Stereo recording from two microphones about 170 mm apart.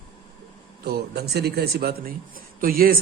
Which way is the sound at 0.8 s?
70° right (ahead or behind).